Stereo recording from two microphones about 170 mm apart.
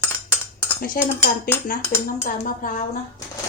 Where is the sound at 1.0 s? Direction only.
60° left (ahead or behind).